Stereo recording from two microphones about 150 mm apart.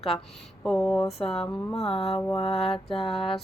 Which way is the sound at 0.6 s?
Centre (ahead or behind).